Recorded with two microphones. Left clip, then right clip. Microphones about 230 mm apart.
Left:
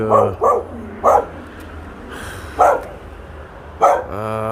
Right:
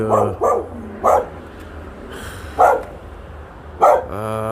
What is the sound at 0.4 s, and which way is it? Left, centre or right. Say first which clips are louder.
Dog: left 2 dB; right.